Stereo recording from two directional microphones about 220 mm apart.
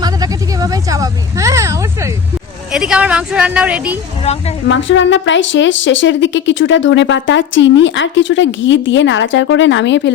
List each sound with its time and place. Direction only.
0.0 s a woman's voice: 15° right (ahead or behind)
2.7 s a woman's voice: 5° right (ahead or behind)
4.2 s a woman's voice: 30° left (ahead or behind)
4.7 s a woman's voice: 55° left (ahead or behind)